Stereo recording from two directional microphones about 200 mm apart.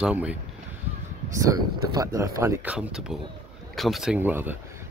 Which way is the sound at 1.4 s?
15° right (ahead or behind).